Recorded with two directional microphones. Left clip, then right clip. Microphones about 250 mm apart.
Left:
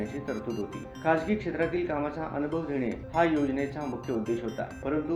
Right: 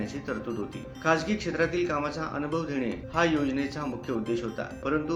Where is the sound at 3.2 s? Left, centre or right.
Centre.